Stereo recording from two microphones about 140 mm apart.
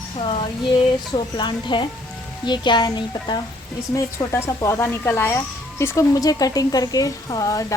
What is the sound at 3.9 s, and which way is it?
Speech, 20° left (ahead or behind).